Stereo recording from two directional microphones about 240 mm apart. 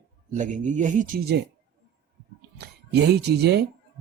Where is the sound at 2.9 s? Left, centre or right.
Right.